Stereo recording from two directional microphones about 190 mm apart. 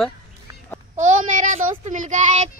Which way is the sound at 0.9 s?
40° right (ahead or behind).